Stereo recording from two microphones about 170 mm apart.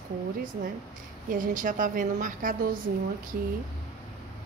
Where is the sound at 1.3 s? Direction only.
50° right (ahead or behind).